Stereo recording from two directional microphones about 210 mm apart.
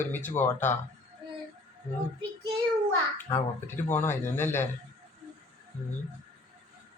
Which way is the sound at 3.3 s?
10° left (ahead or behind).